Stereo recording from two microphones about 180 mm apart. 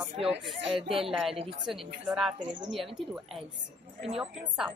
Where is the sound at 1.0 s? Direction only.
Centre (ahead or behind).